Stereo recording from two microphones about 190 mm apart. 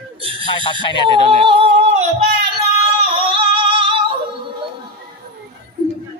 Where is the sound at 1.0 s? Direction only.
25° right (ahead or behind).